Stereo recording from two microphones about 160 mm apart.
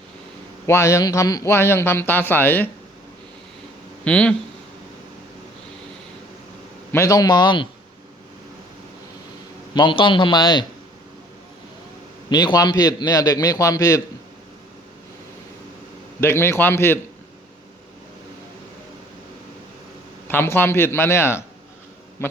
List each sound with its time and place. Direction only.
0.7 s speech: 20° left (ahead or behind)
4.0 s speech: 5° left (ahead or behind)
6.9 s a man's voice: 20° left (ahead or behind)
9.7 s a man's voice: 30° left (ahead or behind)
12.3 s a man's voice: 25° left (ahead or behind)
16.2 s speech: 15° left (ahead or behind)
20.2 s speech: 15° left (ahead or behind)
22.2 s a sound: 15° left (ahead or behind)